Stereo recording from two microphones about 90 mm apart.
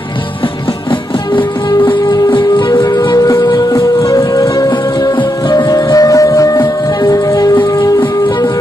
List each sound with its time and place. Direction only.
1.3 s music: 65° left (ahead or behind)
4.4 s music: 45° left (ahead or behind)
6.6 s music: 55° left (ahead or behind)
7.2 s music: 45° left (ahead or behind)